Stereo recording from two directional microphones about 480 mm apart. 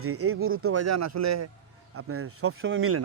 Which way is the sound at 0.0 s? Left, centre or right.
Right.